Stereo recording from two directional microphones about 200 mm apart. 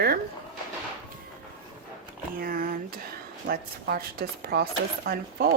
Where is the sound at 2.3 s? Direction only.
45° right (ahead or behind).